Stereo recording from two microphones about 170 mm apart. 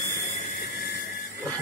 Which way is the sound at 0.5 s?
65° left (ahead or behind).